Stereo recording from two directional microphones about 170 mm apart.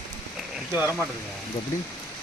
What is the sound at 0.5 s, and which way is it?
Speech, 10° right (ahead or behind).